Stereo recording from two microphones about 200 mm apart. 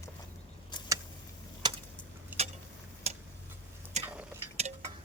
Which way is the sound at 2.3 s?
10° right (ahead or behind).